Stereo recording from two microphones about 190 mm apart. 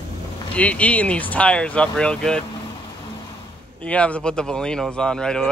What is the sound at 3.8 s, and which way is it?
Speech, 5° left (ahead or behind).